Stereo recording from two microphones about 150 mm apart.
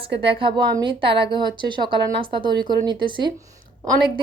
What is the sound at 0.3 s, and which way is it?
A woman's voice, 35° right (ahead or behind).